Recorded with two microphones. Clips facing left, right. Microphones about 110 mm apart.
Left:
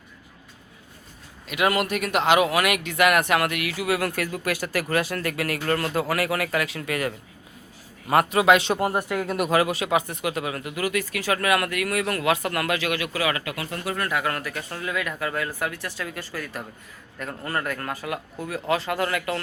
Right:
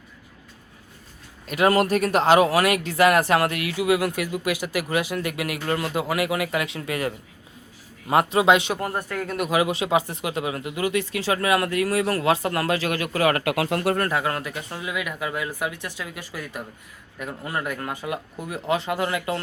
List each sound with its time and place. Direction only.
1.5 s speech: 35° right (ahead or behind); by 8.7 s 20° right (ahead or behind)
8.8 s speech: 10° left (ahead or behind)
9.5 s speech: 20° right (ahead or behind); by 13.4 s 45° right (ahead or behind)
13.4 s speech: 85° right
13.9 s speech: 40° right (ahead or behind)
14.2 s speech: 25° right (ahead or behind)